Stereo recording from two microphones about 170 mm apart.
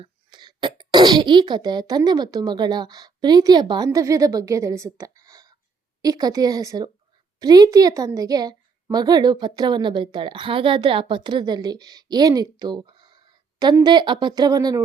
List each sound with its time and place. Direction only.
0.0 s a woman's voice: 25° right (ahead or behind)